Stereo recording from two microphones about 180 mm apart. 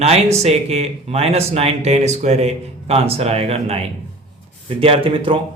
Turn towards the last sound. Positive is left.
turn(degrees=-30)  # may be behind; listen again after turning